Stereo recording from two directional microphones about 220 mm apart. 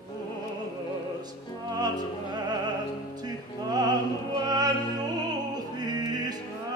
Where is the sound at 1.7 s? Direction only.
20° right (ahead or behind).